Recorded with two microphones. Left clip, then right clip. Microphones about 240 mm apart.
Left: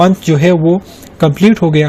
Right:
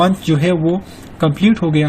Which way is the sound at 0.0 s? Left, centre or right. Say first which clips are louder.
Left 5 dB; left.